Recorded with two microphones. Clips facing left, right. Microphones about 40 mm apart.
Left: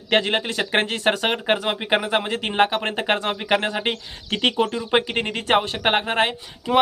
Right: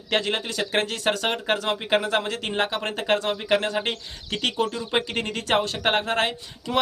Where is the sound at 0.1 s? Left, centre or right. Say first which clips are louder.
Left 4 dB; left.